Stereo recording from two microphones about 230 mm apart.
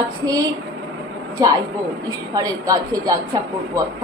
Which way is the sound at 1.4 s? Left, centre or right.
Centre.